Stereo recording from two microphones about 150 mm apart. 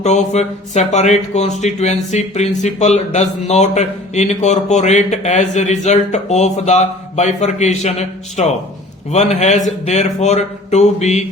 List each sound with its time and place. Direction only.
0.0 s a man's voice: 50° left (ahead or behind)